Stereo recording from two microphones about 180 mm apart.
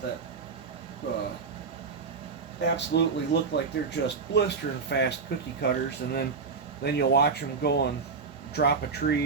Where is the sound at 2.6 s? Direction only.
75° left (ahead or behind).